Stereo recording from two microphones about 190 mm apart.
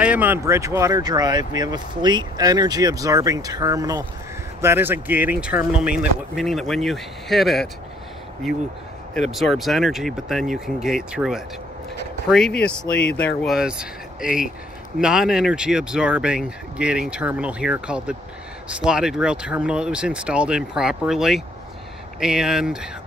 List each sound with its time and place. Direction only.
0.0 s speech: 10° right (ahead or behind)